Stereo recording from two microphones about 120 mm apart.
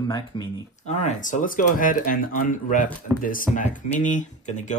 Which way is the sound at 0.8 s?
80° left.